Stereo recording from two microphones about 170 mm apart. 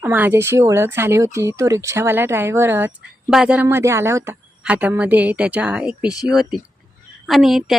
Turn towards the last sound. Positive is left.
turn(degrees=0)  # may be behind; listen again after turning